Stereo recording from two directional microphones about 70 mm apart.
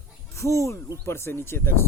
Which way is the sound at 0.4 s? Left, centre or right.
Left.